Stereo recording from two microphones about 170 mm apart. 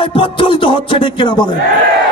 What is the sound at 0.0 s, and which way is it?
A man's voice, 30° left (ahead or behind).